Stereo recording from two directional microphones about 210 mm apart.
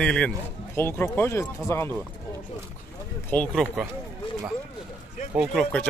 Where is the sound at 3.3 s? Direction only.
5° left (ahead or behind).